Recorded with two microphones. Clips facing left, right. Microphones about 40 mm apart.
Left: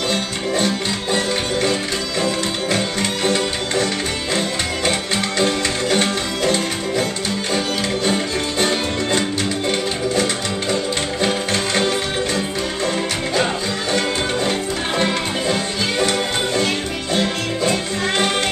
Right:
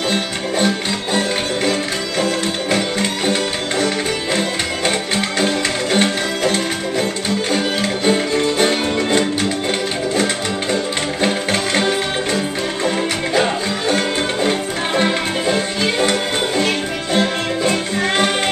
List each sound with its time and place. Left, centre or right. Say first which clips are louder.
1.1 s music: right 1 dB; centre
15.0 s music: right 3 dB; centre